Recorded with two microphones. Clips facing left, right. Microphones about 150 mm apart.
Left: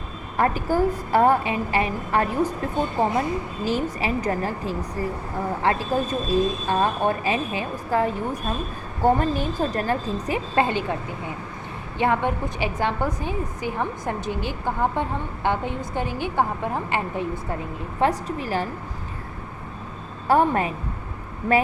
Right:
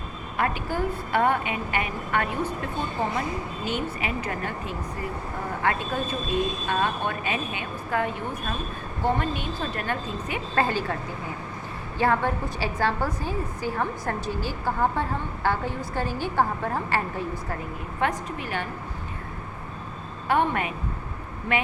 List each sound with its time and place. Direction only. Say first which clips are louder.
0.3 s speech: left 6 dB; 40° left (ahead or behind)
10.5 s a woman's voice: left 2 dB; 20° left (ahead or behind)
11.9 s a woman's voice: left 1 dB; 20° left (ahead or behind)
18.0 s speech: left 5 dB; 35° left (ahead or behind)
20.2 s speech: left 4 dB; 40° left (ahead or behind)